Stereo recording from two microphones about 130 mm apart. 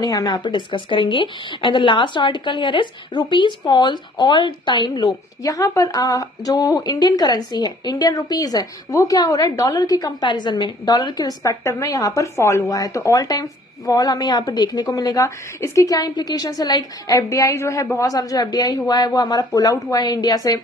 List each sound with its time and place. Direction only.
0.0 s a woman's voice: 30° left (ahead or behind)